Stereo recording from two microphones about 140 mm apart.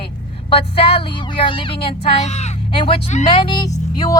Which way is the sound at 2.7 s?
40° left (ahead or behind).